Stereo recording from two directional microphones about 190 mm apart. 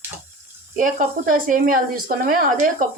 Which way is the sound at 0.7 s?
45° right (ahead or behind).